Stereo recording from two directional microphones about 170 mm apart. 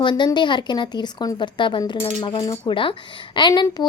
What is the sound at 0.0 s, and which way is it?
A woman's voice, 25° left (ahead or behind).